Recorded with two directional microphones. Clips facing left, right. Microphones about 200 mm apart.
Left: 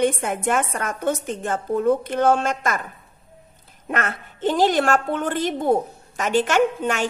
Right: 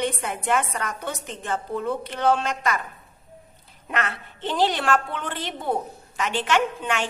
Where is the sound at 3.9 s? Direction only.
45° left (ahead or behind).